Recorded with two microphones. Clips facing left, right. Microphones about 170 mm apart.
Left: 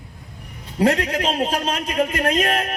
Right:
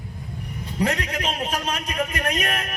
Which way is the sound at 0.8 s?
35° left (ahead or behind).